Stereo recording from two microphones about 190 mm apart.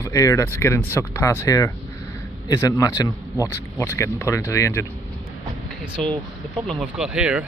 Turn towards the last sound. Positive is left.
turn(degrees=-5)  # may be behind; listen again after turning